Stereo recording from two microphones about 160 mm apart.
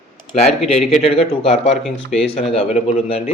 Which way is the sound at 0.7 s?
40° left (ahead or behind).